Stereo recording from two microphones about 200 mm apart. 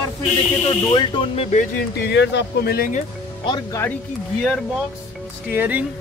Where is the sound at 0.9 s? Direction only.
25° left (ahead or behind).